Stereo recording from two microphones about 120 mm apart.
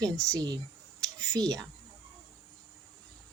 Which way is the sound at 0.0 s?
30° right (ahead or behind).